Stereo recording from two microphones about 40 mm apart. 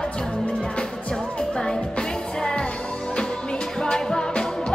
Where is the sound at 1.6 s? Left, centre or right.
Centre.